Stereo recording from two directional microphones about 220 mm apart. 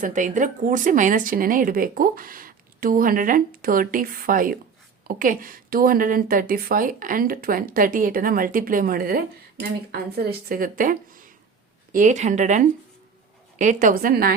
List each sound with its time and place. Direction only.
0.0 s a woman's voice: 35° right (ahead or behind)